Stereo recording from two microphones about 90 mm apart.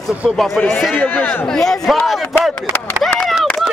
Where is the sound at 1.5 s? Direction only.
5° left (ahead or behind).